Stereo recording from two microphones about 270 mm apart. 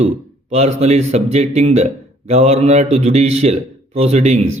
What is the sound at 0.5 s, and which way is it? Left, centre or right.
A man's voice, right.